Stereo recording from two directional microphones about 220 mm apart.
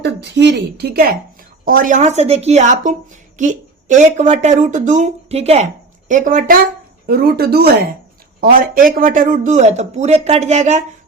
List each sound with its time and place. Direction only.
0.0 s a woman's voice: 50° right (ahead or behind); by 10.8 s 30° right (ahead or behind)